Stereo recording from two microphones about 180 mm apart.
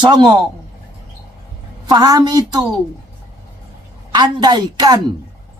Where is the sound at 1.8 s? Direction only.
20° right (ahead or behind).